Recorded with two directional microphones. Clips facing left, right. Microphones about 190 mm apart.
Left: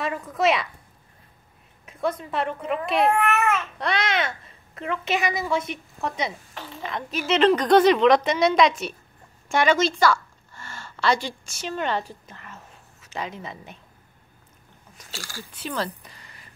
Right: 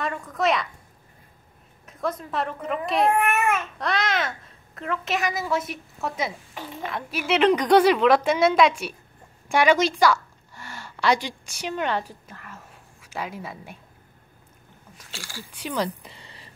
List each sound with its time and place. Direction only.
0.0 s a woman's voice: 5° left (ahead or behind)
1.9 s a child's voice: centre (ahead or behind)
3.3 s babbling: 10° right (ahead or behind)
3.8 s a child's voice: centre (ahead or behind)
15.0 s speech: 40° left (ahead or behind)
15.5 s speech: 15° right (ahead or behind); by 16.5 s 30° right (ahead or behind)